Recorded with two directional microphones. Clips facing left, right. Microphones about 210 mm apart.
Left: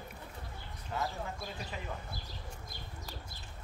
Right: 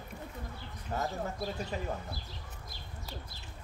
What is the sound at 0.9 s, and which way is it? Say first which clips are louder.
Speech: right 3 dB; 40° right (ahead or behind).